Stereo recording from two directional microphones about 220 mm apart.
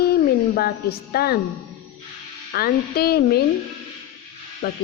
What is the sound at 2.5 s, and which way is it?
Speech, 45° left (ahead or behind).